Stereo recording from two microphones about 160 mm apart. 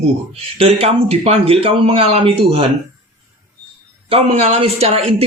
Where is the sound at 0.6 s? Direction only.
35° right (ahead or behind).